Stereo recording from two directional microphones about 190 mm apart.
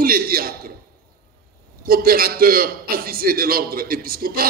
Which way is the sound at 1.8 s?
50° right (ahead or behind).